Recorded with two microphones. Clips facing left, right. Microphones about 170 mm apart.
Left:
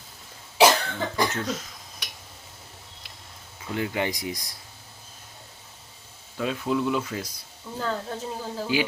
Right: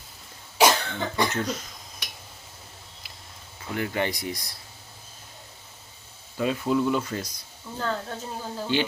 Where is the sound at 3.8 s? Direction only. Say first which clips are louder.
Even; 15° left (ahead or behind).